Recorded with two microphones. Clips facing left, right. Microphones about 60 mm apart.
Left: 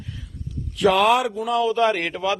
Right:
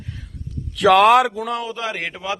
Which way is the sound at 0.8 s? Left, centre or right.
Right.